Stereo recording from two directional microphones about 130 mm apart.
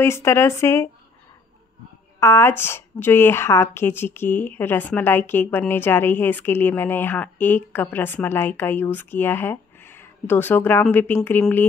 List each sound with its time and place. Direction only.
0.0 s speech: 20° left (ahead or behind)
2.1 s speech: 20° left (ahead or behind)